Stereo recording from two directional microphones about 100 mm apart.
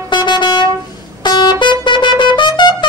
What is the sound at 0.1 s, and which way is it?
Vehicle, 50° left (ahead or behind).